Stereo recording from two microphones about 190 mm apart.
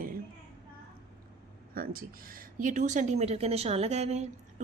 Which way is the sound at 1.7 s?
50° right (ahead or behind).